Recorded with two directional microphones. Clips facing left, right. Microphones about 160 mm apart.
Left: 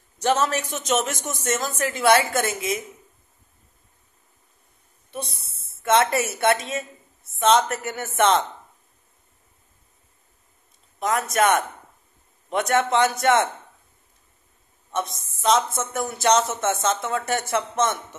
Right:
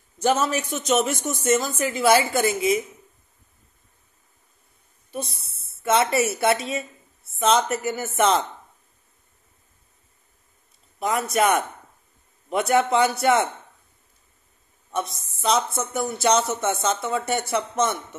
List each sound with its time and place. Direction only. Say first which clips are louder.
0.2 s speech: even; 5° right (ahead or behind)
5.1 s speech: right 2 dB; centre (ahead or behind)
11.0 s speech: even; 5° right (ahead or behind)
14.9 s speech: even; centre (ahead or behind)